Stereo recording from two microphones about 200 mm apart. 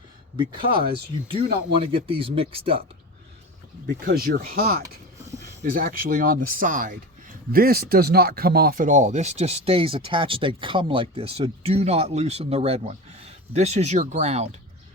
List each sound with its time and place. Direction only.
0.3 s speech: 25° right (ahead or behind)
3.8 s speech: 45° right (ahead or behind)